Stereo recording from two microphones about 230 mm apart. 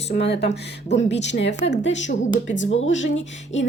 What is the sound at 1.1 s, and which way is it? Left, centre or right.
A woman's voice, left.